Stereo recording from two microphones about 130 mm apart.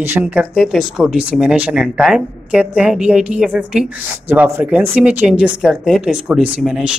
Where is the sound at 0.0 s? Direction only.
15° right (ahead or behind).